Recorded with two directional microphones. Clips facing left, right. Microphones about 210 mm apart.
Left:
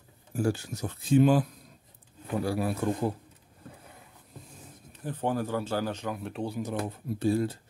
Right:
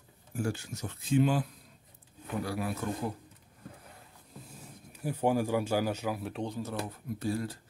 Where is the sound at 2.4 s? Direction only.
30° left (ahead or behind).